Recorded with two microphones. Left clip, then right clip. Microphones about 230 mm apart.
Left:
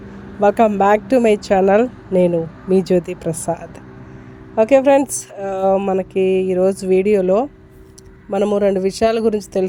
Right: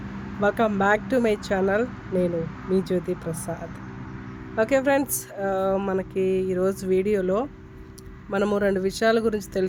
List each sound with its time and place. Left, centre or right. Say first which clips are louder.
0.3 s speech: left 9 dB; left